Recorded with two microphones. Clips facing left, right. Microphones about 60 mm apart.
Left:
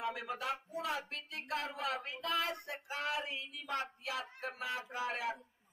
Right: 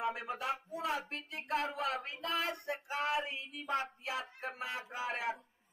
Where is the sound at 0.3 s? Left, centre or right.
Right.